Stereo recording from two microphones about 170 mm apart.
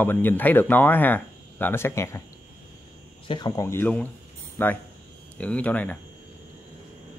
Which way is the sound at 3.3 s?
25° left (ahead or behind).